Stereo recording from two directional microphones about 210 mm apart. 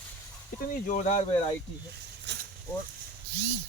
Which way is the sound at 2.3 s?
55° right (ahead or behind).